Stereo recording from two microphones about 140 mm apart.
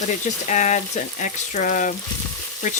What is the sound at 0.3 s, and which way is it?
Stir, 60° left (ahead or behind).